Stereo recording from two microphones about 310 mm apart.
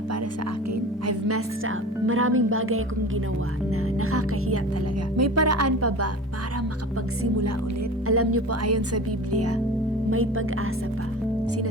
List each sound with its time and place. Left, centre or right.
1.0 s speech: right
4.0 s speech: right
8.0 s speech: right